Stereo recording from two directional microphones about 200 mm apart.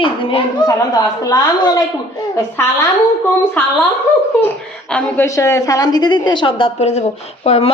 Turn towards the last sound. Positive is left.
turn(degrees=30)  # may be behind; listen again after turning